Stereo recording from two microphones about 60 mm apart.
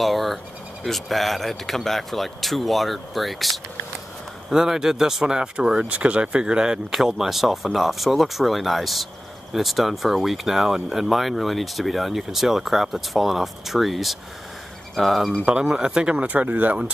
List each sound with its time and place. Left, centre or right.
0.0 s speech: centre
15.6 s speech: centre; by 16.7 s right